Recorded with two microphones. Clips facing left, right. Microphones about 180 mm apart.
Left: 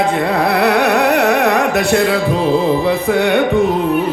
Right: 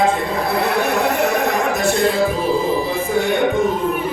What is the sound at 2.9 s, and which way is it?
Music, 65° left (ahead or behind).